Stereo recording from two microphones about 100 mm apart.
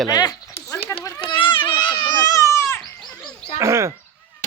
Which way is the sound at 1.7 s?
55° left (ahead or behind).